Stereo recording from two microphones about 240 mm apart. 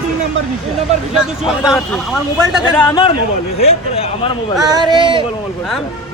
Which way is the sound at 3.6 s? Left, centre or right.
Left.